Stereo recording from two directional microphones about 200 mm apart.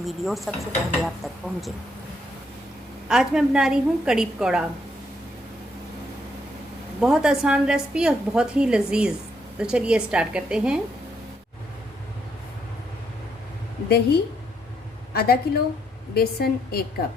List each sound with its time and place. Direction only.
0.0 s a woman's voice: centre (ahead or behind)
3.1 s a woman's voice: 5° right (ahead or behind)
7.0 s a woman's voice: 5° right (ahead or behind)
13.8 s a woman's voice: 50° left (ahead or behind)